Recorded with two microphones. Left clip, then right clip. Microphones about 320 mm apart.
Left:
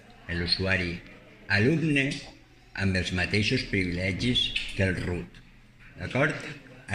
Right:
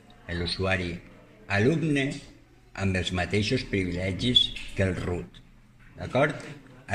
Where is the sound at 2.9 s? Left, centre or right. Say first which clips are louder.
Right 1 dB; right.